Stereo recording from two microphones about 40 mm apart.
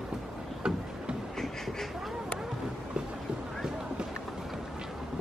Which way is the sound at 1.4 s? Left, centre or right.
Centre.